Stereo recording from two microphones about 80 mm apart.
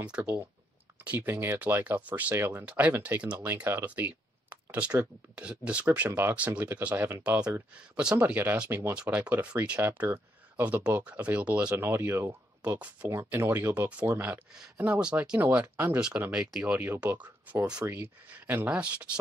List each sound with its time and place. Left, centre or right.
0.2 s speech: right
2.3 s speech: right
2.6 s speech: centre
6.0 s speech: right
6.3 s speech: centre
8.9 s speech: centre; by 12.7 s right
12.7 s speech: centre
13.1 s speech: right; by 16.7 s centre
16.7 s speech: right